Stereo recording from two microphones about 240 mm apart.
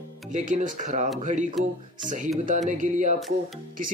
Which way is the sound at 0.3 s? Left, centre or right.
Right.